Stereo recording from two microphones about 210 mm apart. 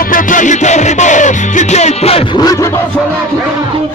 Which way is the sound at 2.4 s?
15° left (ahead or behind).